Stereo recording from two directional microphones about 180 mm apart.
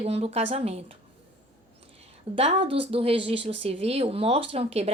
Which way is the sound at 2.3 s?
35° right (ahead or behind).